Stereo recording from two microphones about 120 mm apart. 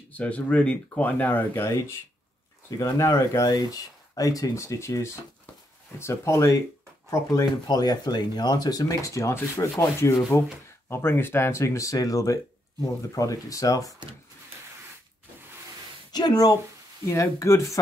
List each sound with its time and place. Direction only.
0.1 s speech: 10° left (ahead or behind); by 13.9 s 30° left (ahead or behind)
16.1 s speech: 35° left (ahead or behind)